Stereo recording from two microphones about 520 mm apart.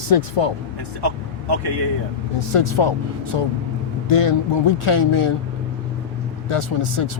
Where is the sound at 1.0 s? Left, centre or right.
Right.